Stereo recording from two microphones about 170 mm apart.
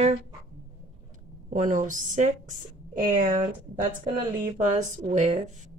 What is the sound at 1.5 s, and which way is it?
Speech, 50° right (ahead or behind).